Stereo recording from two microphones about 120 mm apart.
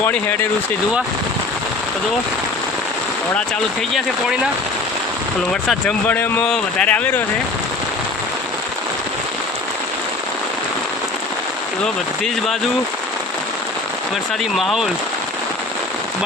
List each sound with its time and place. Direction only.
0.0 s speech: 15° left (ahead or behind)
6.5 s speech: 10° left (ahead or behind)
14.5 s speech: centre (ahead or behind)